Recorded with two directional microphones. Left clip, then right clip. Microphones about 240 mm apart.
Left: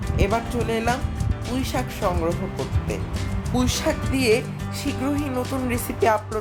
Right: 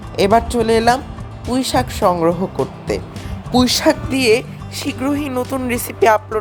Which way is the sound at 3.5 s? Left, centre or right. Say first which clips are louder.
Right 10 dB; right.